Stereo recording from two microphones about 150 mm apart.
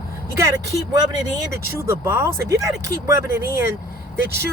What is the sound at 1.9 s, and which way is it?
Speech, 15° right (ahead or behind).